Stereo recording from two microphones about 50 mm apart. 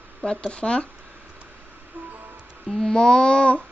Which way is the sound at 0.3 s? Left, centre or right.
Centre.